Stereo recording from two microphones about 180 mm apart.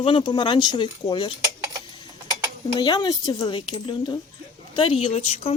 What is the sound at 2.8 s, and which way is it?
Speech, 25° left (ahead or behind).